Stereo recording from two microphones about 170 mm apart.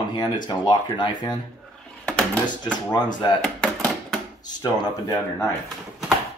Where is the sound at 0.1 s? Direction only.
25° left (ahead or behind).